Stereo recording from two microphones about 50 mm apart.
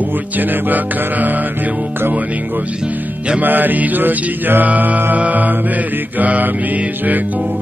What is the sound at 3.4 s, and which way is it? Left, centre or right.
Music, right.